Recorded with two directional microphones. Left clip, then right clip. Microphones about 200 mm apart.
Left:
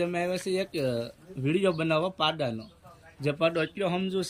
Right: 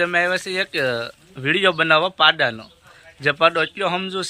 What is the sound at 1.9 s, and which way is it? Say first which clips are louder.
A man's voice: right 11 dB; 5° left (ahead or behind).